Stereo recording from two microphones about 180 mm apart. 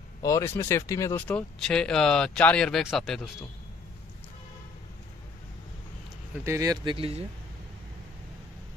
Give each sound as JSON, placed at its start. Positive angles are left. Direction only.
{"t": 0.2, "sound": "speech", "side_deg": 15}
{"t": 1.3, "sound": "speech", "side_deg": 5}
{"t": 6.4, "sound": "speech", "side_deg": -20}